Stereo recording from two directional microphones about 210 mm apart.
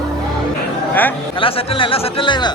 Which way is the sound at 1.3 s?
25° left (ahead or behind).